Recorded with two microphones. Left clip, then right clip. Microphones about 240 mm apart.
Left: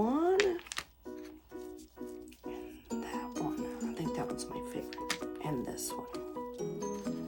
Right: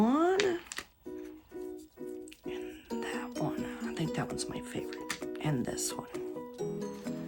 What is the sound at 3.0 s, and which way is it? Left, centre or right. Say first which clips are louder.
Music: right 2 dB; right.